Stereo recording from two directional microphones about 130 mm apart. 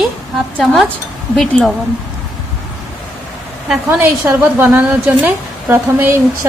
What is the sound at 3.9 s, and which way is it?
A woman's voice, 15° right (ahead or behind).